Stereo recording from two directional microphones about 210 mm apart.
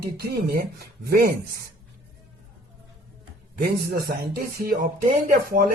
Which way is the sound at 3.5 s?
50° right (ahead or behind).